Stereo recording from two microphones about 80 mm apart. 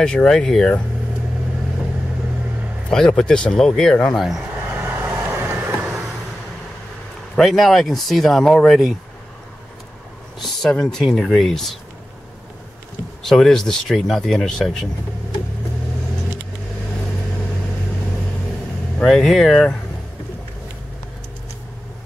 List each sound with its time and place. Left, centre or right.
0.0 s speech: centre
2.9 s speech: centre
4.2 s speech: centre
4.6 s vehicle: right
7.3 s speech: centre
10.4 s speech: centre
13.2 s speech: centre
18.9 s speech: centre